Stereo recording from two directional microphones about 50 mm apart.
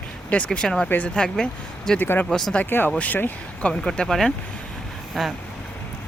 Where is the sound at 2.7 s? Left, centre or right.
Left.